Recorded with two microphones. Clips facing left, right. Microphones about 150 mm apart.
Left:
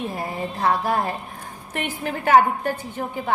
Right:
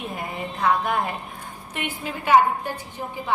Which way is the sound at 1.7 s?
50° left (ahead or behind).